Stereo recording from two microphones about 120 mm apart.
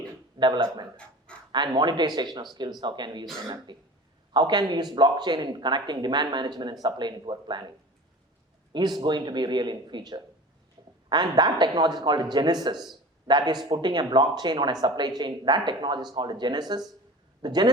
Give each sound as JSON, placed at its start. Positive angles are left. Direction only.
{"t": 0.3, "sound": "speech", "side_deg": -40}
{"t": 8.7, "sound": "speech", "side_deg": -35}
{"t": 10.8, "sound": "a sound", "side_deg": -40}
{"t": 11.1, "sound": "speech", "side_deg": -35}